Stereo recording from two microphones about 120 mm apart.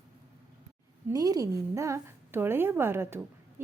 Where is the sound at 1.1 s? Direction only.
30° right (ahead or behind).